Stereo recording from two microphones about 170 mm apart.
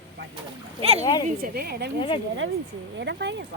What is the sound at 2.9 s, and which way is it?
Speech, 90° right.